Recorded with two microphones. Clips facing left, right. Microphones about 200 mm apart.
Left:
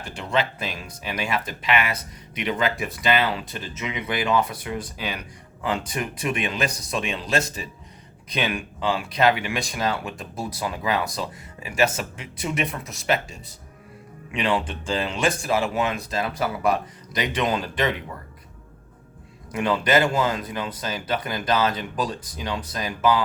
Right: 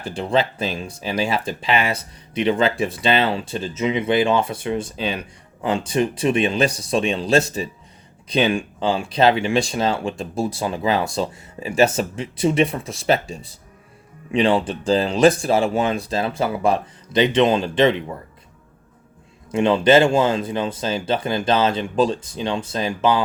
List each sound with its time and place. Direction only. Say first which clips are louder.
0.0 s speech: right 5 dB; 30° right (ahead or behind)
19.5 s speech: right 7 dB; 25° right (ahead or behind)